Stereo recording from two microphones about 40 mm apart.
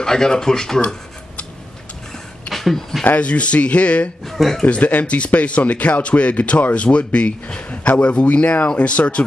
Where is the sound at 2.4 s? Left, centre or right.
Centre.